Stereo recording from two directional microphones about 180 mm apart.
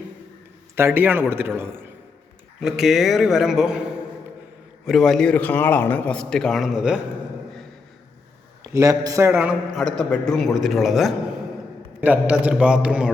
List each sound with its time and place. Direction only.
0.8 s a man's voice: 10° right (ahead or behind)
2.6 s a man's voice: centre (ahead or behind)
4.9 s a man's voice: centre (ahead or behind)
8.6 s a man's voice: 15° right (ahead or behind)
9.3 s a man's voice: 5° right (ahead or behind)